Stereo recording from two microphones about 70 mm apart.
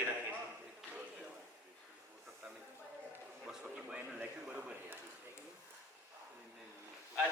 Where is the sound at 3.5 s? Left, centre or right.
Centre.